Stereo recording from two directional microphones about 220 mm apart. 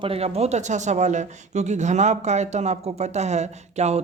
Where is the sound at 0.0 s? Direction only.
25° right (ahead or behind).